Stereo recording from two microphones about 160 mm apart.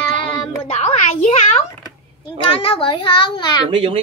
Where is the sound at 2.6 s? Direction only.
30° left (ahead or behind).